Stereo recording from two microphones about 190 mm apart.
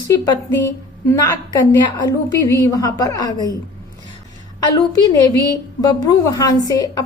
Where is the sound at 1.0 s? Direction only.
15° left (ahead or behind).